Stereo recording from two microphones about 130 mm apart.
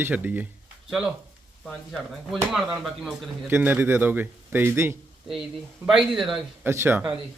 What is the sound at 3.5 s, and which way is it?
A man's voice, 15° right (ahead or behind).